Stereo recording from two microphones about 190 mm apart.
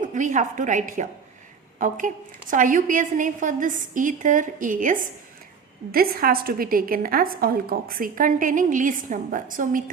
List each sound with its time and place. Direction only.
0.0 s a woman's voice: 40° right (ahead or behind)